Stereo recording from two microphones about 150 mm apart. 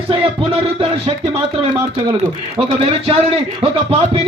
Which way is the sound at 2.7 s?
40° right (ahead or behind).